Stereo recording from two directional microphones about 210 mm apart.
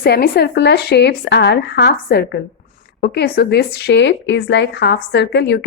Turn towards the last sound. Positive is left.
turn(degrees=55)  # may be behind; listen again after turning